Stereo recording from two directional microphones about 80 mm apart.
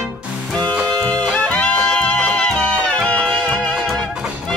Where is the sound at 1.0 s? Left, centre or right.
Centre.